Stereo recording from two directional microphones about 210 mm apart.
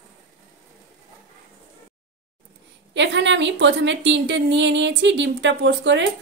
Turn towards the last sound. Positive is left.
turn(degrees=-60)  # may be behind; listen again after turning